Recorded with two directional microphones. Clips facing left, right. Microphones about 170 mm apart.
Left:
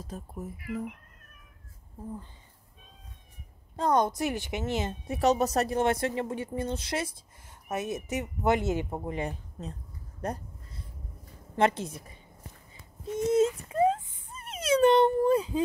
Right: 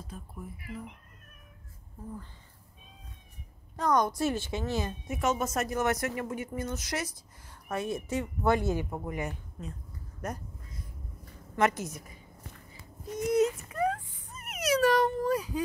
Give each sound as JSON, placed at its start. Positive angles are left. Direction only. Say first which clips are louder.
{"t": 0.0, "sound": "speech", "louder": "left 4 dB", "side_deg": 40}
{"t": 3.7, "sound": "speech", "louder": "left 2 dB", "side_deg": 25}
{"t": 5.0, "sound": "speech", "louder": "left 7 dB", "side_deg": 35}
{"t": 10.2, "sound": "a sound", "louder": "left 3 dB", "side_deg": 30}
{"t": 11.5, "sound": "speech", "louder": "left 2 dB", "side_deg": 30}
{"t": 13.0, "sound": "a sound", "louder": "left 2 dB", "side_deg": 25}